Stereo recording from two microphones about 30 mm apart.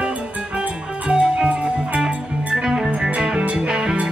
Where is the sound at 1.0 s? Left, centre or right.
Right.